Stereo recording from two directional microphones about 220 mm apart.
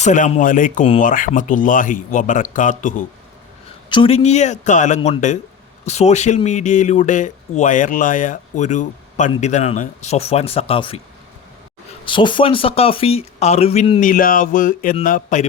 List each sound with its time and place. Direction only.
0.0 s speech: 35° left (ahead or behind)
3.8 s speech: 20° left (ahead or behind)
12.0 s speech: 20° left (ahead or behind)
14.1 s speech: 40° left (ahead or behind)